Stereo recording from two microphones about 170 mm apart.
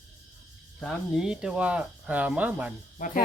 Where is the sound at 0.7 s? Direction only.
Centre (ahead or behind).